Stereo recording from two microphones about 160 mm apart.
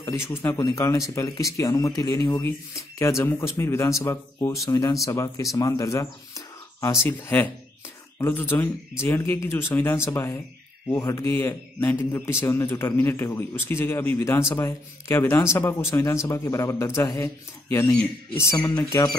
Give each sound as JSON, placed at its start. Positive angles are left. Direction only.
{"t": 0.0, "sound": "a man's voice", "side_deg": 15}